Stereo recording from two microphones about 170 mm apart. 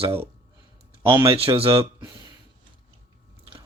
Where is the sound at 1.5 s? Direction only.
30° right (ahead or behind).